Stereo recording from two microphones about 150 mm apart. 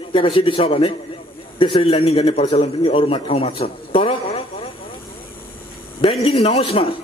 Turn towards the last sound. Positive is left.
turn(degrees=40)  # may be behind; listen again after turning